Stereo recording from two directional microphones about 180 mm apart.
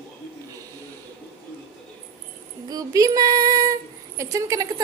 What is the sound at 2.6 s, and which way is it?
Female singing, 20° right (ahead or behind).